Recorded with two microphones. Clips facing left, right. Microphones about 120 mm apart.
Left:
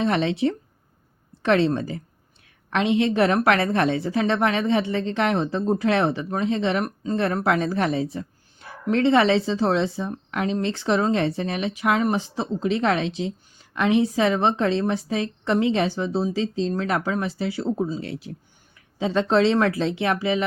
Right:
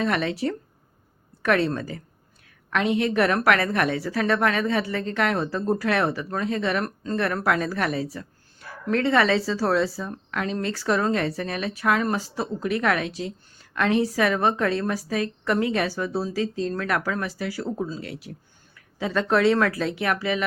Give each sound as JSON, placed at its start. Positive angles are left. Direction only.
{"t": 0.0, "sound": "a woman's voice", "side_deg": 25}